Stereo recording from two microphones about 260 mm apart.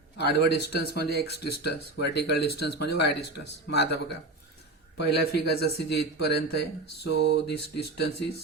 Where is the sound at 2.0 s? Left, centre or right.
Left.